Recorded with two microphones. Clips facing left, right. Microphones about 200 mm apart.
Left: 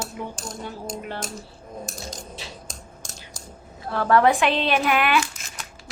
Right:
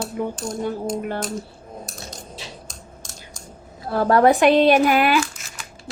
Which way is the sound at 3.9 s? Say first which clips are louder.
Right 3 dB; 40° right (ahead or behind).